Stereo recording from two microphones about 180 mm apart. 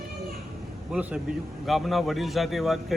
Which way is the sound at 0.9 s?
5° right (ahead or behind).